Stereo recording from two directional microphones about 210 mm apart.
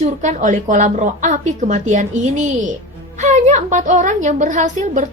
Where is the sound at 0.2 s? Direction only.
35° right (ahead or behind).